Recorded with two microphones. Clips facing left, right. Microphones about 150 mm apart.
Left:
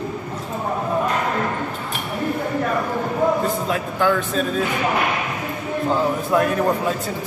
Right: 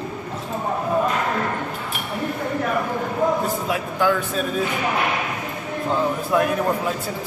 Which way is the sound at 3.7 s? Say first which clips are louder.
Right 1 dB; 5° right (ahead or behind).